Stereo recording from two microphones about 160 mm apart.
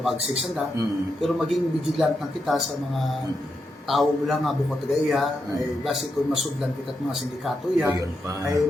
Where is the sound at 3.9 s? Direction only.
Centre (ahead or behind).